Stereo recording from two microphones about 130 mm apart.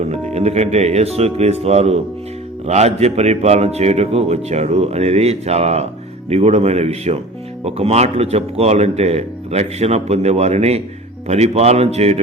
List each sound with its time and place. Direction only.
0.1 s speech: 55° right (ahead or behind)